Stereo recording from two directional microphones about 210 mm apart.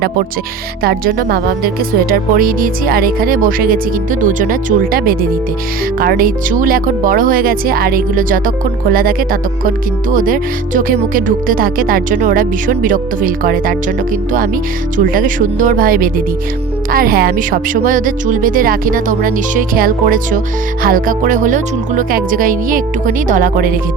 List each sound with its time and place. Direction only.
0.8 s speech: 45° right (ahead or behind)
14.9 s speech: 40° right (ahead or behind)